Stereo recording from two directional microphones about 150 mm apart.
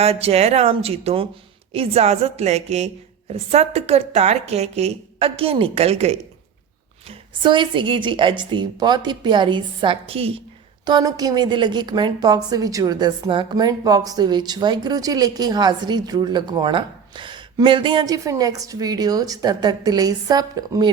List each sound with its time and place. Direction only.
0.0 s a woman's voice: 40° right (ahead or behind)
7.1 s a woman's voice: 30° right (ahead or behind)
10.8 s a woman's voice: 25° right (ahead or behind)